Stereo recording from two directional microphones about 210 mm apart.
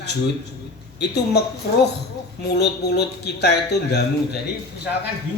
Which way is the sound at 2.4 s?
50° left (ahead or behind).